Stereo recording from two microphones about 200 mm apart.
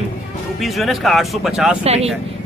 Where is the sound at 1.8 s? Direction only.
30° right (ahead or behind).